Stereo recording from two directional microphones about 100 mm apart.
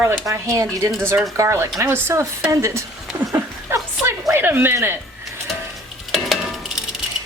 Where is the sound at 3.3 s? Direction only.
25° right (ahead or behind).